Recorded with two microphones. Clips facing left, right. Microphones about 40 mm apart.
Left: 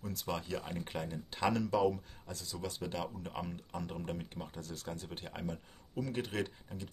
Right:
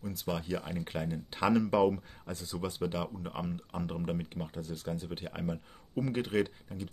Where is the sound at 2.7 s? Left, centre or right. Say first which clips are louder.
Right 5 dB; centre.